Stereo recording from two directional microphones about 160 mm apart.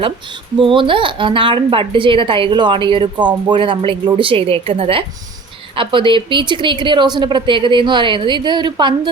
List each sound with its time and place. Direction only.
0.6 s a woman's voice: 30° right (ahead or behind)